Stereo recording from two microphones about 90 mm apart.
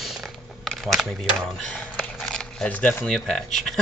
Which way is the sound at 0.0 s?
Centre (ahead or behind).